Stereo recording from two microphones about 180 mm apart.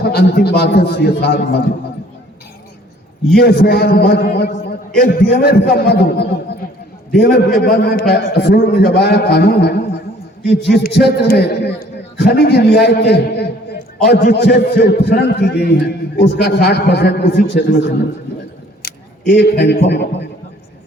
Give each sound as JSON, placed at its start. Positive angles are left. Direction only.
{"t": 0.0, "sound": "a man's voice", "side_deg": 60}
{"t": 3.3, "sound": "a man's voice", "side_deg": 65}
{"t": 19.3, "sound": "a man's voice", "side_deg": 65}